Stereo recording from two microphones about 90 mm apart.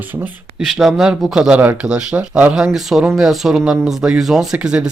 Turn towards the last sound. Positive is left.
turn(degrees=-10)  # may be behind; listen again after turning